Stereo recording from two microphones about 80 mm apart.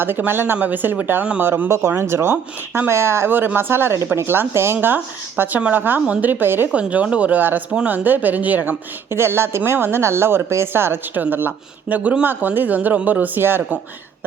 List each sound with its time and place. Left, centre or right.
0.0 s speech: right
6.7 s speech: centre
9.0 s speech: right